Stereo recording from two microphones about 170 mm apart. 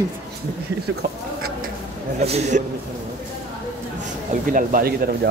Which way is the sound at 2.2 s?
40° right (ahead or behind).